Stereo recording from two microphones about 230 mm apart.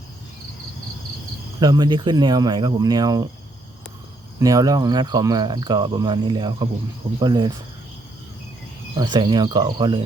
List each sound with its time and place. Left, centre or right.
1.5 s cricket: centre
4.4 s cricket: centre
9.0 s speech: centre